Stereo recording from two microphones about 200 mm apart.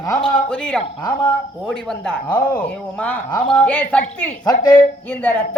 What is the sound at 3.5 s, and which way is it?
Speech, 5° left (ahead or behind).